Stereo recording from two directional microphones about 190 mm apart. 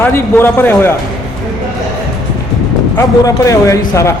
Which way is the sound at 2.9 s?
15° left (ahead or behind).